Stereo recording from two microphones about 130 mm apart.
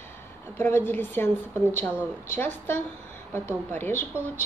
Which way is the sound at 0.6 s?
15° left (ahead or behind).